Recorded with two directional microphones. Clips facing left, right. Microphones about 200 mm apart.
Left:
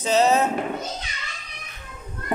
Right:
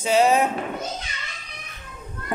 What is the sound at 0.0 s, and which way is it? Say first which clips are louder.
Speech: right 1 dB; 10° right (ahead or behind).